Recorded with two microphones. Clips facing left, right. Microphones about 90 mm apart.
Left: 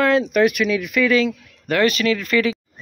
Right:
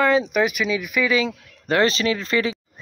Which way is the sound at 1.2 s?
25° right (ahead or behind).